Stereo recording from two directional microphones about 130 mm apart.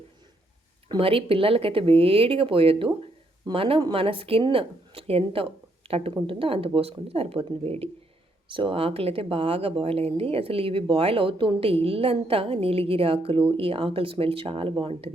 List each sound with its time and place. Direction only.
0.9 s speech: 45° right (ahead or behind)